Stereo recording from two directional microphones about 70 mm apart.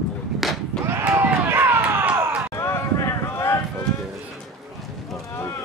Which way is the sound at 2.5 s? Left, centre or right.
Left.